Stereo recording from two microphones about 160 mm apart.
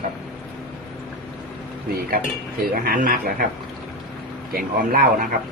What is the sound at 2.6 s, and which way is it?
Speech, 65° right (ahead or behind).